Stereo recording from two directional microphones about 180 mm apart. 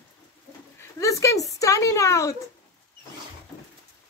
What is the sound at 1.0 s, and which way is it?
Speech, 15° left (ahead or behind).